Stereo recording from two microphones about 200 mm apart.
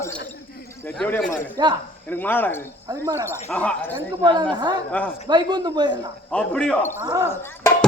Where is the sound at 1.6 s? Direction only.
20° right (ahead or behind).